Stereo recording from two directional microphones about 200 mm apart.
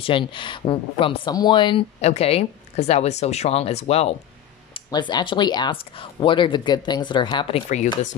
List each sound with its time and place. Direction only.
0.0 s speech: 25° left (ahead or behind)